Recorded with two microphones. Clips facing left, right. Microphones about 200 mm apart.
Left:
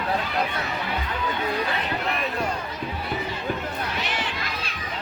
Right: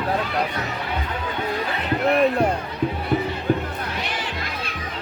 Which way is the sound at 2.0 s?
55° right (ahead or behind).